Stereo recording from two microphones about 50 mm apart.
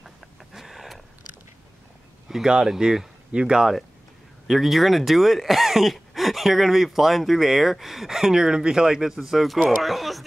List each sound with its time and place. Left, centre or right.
0.0 s vehicle: centre
2.2 s speech: centre
4.5 s speech: centre